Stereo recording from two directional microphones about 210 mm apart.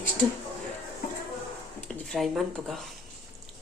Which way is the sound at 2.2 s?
Centre (ahead or behind).